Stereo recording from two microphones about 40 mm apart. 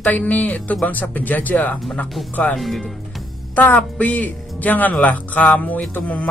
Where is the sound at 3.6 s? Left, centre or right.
Left.